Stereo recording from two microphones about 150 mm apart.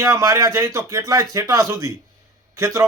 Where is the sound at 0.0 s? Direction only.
20° right (ahead or behind).